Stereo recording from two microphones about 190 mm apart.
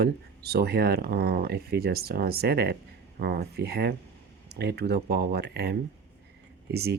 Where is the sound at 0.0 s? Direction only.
55° right (ahead or behind).